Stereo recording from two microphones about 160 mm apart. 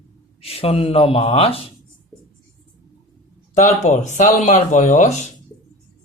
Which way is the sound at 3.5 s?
45° left (ahead or behind).